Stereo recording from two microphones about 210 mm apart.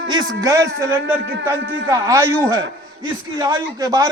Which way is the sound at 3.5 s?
20° right (ahead or behind).